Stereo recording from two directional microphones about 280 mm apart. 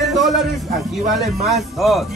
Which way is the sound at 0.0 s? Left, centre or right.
Centre.